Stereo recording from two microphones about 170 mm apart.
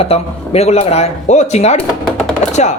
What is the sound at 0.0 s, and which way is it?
A woman's voice, 35° left (ahead or behind).